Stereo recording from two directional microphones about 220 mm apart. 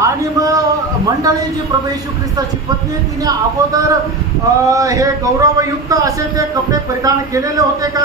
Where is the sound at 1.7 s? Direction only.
20° right (ahead or behind).